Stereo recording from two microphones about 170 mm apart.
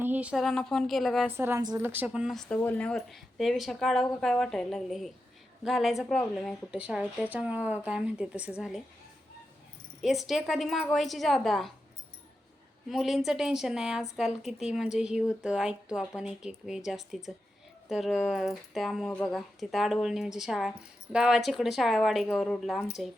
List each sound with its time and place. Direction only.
0.0 s speech: 10° right (ahead or behind)
1.4 s speech: 15° right (ahead or behind)
1.9 s speech: 10° right (ahead or behind)
10.0 s speech: centre (ahead or behind)
12.9 s speech: centre (ahead or behind)